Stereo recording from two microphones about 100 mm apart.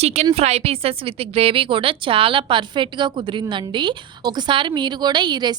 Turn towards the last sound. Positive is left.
turn(degrees=-45)  # may be behind; listen again after turning